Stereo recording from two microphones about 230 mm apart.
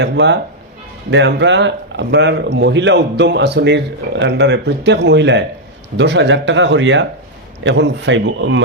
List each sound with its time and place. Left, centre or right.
0.0 s speech: right